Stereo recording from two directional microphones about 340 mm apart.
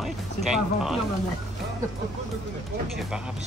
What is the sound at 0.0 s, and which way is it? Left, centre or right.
Speech, centre.